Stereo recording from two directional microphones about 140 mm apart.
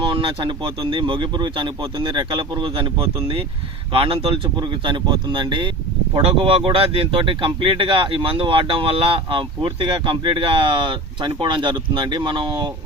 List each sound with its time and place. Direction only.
0.0 s speech: 35° right (ahead or behind)